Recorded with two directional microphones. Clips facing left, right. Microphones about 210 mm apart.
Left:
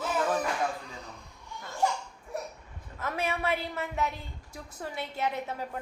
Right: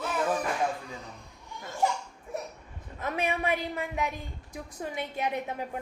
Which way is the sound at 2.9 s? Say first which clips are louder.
Right 2 dB; 15° right (ahead or behind).